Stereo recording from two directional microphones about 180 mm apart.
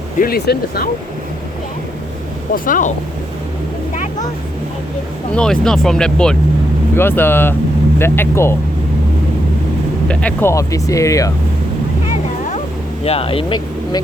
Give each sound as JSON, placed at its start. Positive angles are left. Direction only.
{"t": 0.2, "sound": "speech", "side_deg": 60}
{"t": 2.5, "sound": "speech", "side_deg": 50}
{"t": 5.3, "sound": "speech", "side_deg": 5}
{"t": 10.1, "sound": "speech", "side_deg": 5}
{"t": 13.1, "sound": "speech", "side_deg": 30}